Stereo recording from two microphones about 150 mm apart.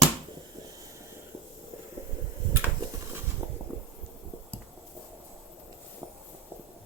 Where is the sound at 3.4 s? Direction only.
15° right (ahead or behind).